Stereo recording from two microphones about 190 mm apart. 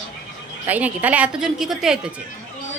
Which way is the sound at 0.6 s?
10° right (ahead or behind).